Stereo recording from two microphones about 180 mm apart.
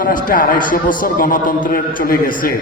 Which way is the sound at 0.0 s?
50° left (ahead or behind).